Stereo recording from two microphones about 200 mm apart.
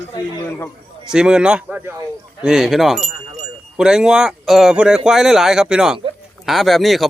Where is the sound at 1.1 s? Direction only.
5° right (ahead or behind).